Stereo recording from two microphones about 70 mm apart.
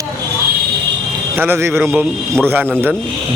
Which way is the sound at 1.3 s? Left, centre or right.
Right.